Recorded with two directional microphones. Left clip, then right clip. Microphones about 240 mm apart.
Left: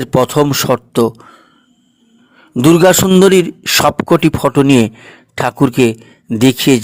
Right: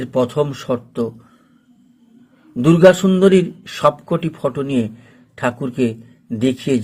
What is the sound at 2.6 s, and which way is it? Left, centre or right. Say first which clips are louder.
A man's voice: left 3 dB; left.